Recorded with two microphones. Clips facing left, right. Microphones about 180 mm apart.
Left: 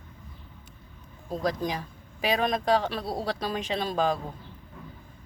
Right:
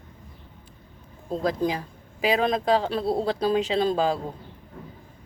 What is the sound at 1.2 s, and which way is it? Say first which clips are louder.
Speech: right 4 dB; 25° right (ahead or behind).